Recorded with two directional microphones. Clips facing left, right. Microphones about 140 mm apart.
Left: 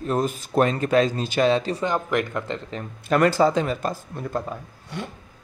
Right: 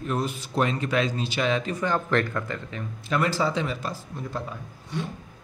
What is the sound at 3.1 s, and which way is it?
A man's voice, 55° left (ahead or behind).